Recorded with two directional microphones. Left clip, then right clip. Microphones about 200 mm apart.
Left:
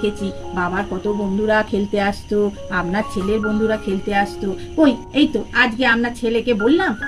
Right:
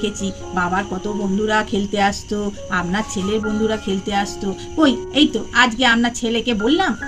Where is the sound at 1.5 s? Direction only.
55° right (ahead or behind).